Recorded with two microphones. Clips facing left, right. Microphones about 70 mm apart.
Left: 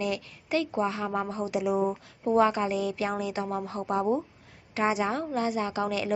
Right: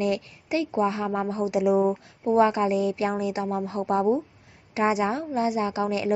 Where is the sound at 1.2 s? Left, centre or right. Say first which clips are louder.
Right 5 dB; right.